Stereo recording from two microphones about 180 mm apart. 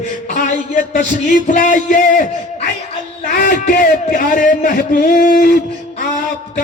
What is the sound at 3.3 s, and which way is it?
A man's voice, 55° left (ahead or behind).